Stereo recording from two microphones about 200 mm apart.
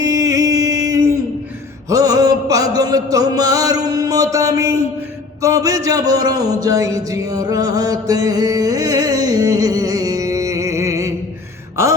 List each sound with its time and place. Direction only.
0.0 s music: 15° right (ahead or behind)
1.9 s mantra: 15° right (ahead or behind)
5.4 s a sound: 15° right (ahead or behind)